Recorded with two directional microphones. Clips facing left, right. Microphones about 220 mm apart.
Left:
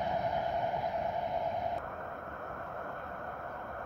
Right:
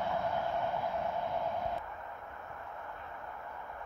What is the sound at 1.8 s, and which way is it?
Vehicle, 55° left (ahead or behind).